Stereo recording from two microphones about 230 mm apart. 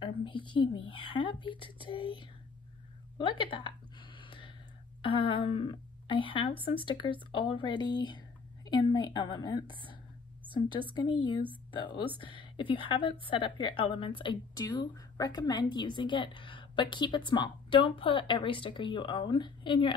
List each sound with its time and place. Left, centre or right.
0.0 s a woman's voice: left
4.2 s gasp: left
5.0 s a woman's voice: left
11.0 s a woman's voice: centre